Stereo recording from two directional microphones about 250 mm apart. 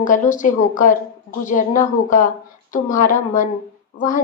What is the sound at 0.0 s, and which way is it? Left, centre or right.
Speech, left.